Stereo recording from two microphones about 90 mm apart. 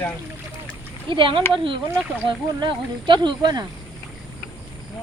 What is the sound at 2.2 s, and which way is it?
Speech, 60° right (ahead or behind).